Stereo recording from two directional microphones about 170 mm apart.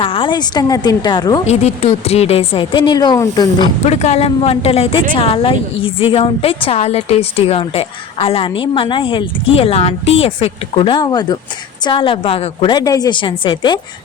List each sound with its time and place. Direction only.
0.0 s a woman's voice: 30° left (ahead or behind)
1.5 s a woman's voice: 35° left (ahead or behind)
3.8 s a woman's voice: 40° left (ahead or behind)